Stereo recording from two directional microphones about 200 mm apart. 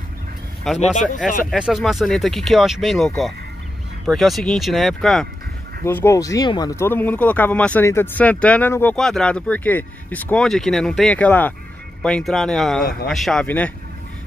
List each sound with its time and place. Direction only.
0.7 s speech: 40° left (ahead or behind)
1.5 s speech: centre (ahead or behind)
5.9 s speech: 10° left (ahead or behind)